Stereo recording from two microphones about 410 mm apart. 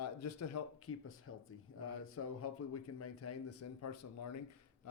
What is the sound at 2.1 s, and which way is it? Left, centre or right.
Speech, left.